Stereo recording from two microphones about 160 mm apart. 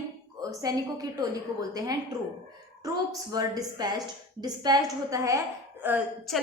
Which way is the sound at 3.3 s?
25° right (ahead or behind).